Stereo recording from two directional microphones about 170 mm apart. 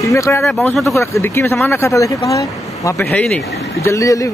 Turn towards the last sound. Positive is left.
turn(degrees=20)  # may be behind; listen again after turning